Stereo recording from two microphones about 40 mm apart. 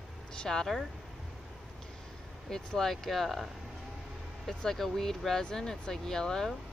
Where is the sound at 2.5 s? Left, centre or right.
Centre.